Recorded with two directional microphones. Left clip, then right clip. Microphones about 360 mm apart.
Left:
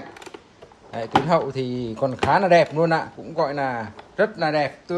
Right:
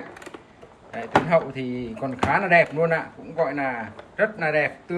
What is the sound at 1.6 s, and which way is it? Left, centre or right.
Speech, left.